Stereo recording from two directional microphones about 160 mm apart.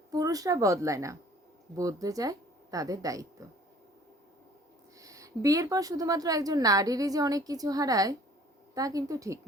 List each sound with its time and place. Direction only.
0.1 s a woman's voice: 20° right (ahead or behind)
4.9 s a woman's voice: 20° right (ahead or behind)